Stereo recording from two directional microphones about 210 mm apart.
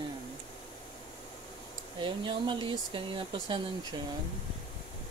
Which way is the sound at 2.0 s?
25° right (ahead or behind).